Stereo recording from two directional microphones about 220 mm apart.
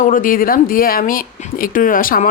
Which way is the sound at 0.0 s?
40° left (ahead or behind).